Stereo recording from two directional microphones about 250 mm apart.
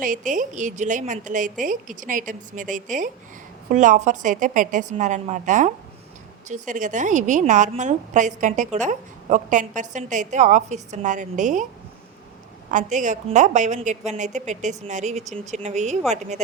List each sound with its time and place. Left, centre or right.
0.0 s a woman's voice: right
12.7 s a woman's voice: right